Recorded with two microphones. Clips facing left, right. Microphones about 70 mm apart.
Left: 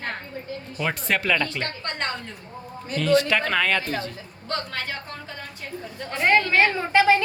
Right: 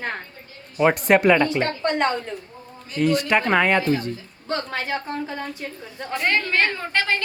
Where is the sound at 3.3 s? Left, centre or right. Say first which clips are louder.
Right 4 dB; right.